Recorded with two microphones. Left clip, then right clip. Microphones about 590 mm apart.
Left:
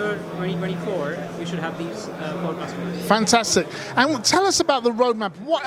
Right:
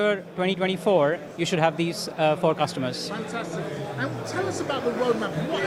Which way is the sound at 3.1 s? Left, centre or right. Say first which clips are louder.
Left 13 dB; left.